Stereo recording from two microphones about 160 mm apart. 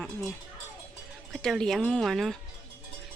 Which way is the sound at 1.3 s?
Centre (ahead or behind).